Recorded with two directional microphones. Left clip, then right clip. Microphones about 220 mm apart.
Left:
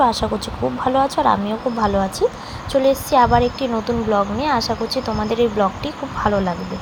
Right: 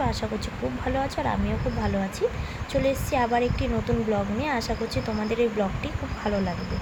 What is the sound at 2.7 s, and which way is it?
A woman's voice, 10° left (ahead or behind).